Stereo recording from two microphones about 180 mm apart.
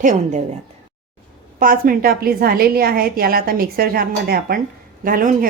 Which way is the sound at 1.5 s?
50° right (ahead or behind).